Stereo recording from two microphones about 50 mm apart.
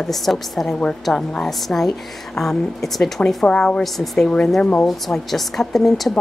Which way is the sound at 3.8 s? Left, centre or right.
Centre.